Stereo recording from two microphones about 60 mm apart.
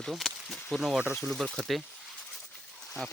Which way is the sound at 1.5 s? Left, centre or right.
Centre.